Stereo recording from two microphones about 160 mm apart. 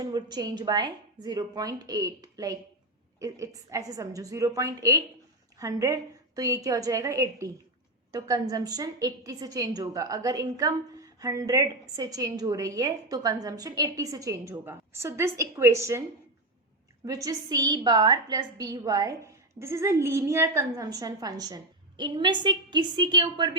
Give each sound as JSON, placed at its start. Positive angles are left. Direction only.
{"t": 0.0, "sound": "a woman's voice", "side_deg": -25}
{"t": 17.1, "sound": "a woman's voice", "side_deg": -20}